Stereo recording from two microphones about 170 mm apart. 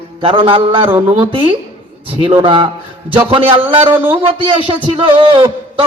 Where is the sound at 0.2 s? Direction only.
30° right (ahead or behind).